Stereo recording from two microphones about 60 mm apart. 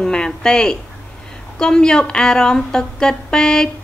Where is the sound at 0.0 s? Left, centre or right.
Centre.